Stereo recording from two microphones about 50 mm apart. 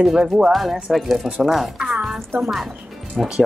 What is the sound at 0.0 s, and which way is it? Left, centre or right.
Speech, centre.